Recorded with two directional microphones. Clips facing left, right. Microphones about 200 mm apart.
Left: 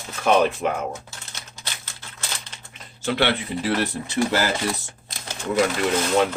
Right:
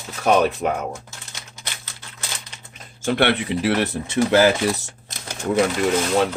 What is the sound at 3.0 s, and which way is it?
Speech, 50° right (ahead or behind).